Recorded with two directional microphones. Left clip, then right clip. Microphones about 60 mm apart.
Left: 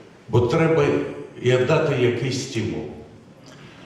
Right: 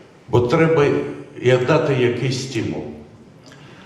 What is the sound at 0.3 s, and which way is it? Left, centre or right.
A man's voice, right.